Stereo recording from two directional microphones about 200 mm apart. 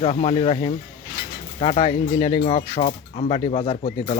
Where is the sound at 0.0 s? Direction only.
30° left (ahead or behind).